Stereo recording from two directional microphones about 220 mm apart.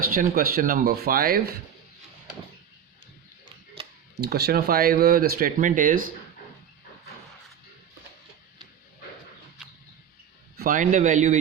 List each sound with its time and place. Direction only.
0.0 s speech: 40° right (ahead or behind)
4.2 s speech: 45° right (ahead or behind)
10.6 s speech: 35° right (ahead or behind)